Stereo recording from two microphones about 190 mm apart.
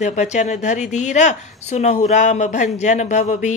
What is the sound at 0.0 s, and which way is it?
Speech, 40° left (ahead or behind).